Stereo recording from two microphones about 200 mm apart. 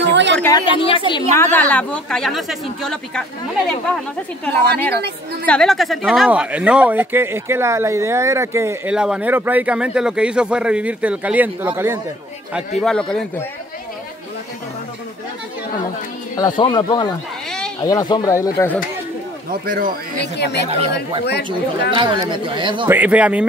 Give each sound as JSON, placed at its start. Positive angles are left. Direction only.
{"t": 0.0, "sound": "a sound", "side_deg": -60}
{"t": 0.4, "sound": "a woman's voice", "side_deg": 20}
{"t": 1.3, "sound": "speech", "side_deg": 10}
{"t": 5.5, "sound": "speech", "side_deg": 0}
{"t": 12.8, "sound": "speech", "side_deg": 5}
{"t": 16.3, "sound": "a woman's voice", "side_deg": 20}
{"t": 19.6, "sound": "speech", "side_deg": -45}
{"t": 20.2, "sound": "speech", "side_deg": 60}
{"t": 20.6, "sound": "speech", "side_deg": -30}
{"t": 21.9, "sound": "speech", "side_deg": -25}
{"t": 22.8, "sound": "speech", "side_deg": -10}